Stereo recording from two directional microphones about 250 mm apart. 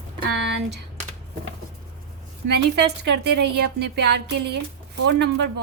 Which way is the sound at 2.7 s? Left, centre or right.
Right.